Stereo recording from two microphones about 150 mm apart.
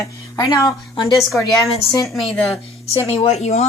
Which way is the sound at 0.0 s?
20° left (ahead or behind).